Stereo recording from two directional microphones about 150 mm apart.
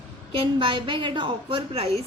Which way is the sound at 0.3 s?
35° right (ahead or behind).